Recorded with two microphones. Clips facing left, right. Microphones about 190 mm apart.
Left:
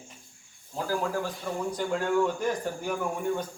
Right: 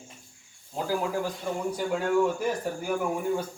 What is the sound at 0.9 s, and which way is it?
A man's voice, 15° right (ahead or behind).